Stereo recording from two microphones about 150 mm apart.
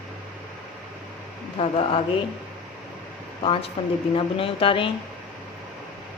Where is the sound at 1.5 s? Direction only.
40° left (ahead or behind).